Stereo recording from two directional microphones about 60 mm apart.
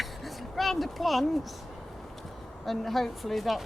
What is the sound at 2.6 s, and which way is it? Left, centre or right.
Speech, centre.